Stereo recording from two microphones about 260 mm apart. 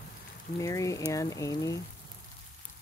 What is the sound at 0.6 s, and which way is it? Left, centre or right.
Speech, centre.